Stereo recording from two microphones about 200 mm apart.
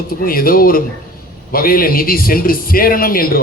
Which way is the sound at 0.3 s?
45° left (ahead or behind).